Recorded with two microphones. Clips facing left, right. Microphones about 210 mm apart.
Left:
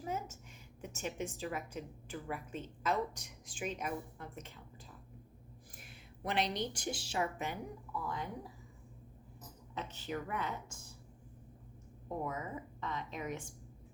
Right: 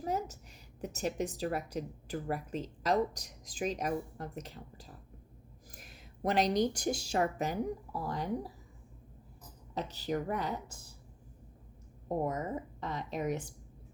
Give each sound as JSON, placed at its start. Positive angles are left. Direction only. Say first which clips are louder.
{"t": 0.0, "sound": "a sound", "louder": "right 5 dB", "side_deg": -35}
{"t": 0.8, "sound": "a woman's voice", "louder": "right 6 dB", "side_deg": -40}
{"t": 9.7, "sound": "a woman's voice", "louder": "right 6 dB", "side_deg": -35}
{"t": 12.0, "sound": "a woman's voice", "louder": "right 6 dB", "side_deg": -40}